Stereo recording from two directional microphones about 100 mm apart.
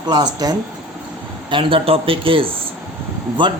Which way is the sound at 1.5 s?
60° right (ahead or behind).